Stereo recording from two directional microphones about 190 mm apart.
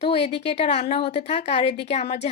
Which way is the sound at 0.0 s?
35° left (ahead or behind).